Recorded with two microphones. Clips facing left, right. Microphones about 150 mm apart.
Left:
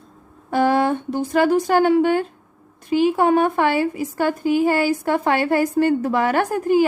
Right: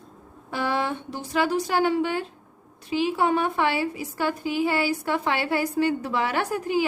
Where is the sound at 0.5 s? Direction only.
50° left (ahead or behind).